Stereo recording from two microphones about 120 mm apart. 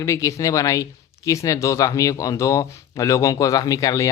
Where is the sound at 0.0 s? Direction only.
25° left (ahead or behind).